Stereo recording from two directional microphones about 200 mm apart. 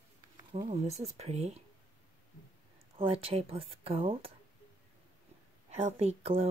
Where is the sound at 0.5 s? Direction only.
30° right (ahead or behind).